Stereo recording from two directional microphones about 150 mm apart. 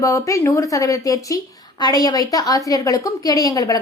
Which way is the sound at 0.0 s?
20° left (ahead or behind).